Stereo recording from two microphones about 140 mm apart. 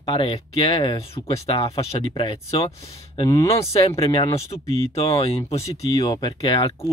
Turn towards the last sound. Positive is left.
turn(degrees=40)  # may be behind; listen again after turning